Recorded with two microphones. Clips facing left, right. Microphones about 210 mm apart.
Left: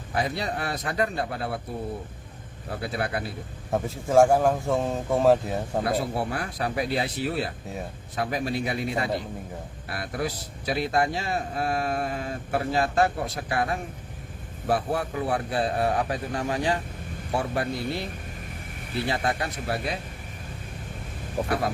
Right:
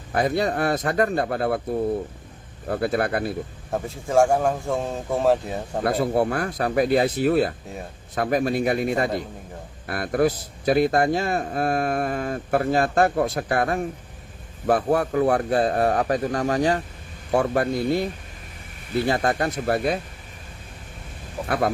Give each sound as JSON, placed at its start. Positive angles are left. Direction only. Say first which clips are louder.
{"t": 0.1, "sound": "speech", "louder": "right 6 dB", "side_deg": -50}
{"t": 2.6, "sound": "speech", "louder": "right 7 dB", "side_deg": -50}
{"t": 3.7, "sound": "speech", "louder": "left 2 dB", "side_deg": 0}
{"t": 6.1, "sound": "speech", "louder": "right 7 dB", "side_deg": -50}
{"t": 19.0, "sound": "speech", "louder": "right 5 dB", "side_deg": -45}